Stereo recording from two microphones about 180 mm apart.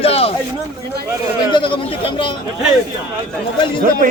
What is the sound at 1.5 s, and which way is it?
Speech, 25° left (ahead or behind).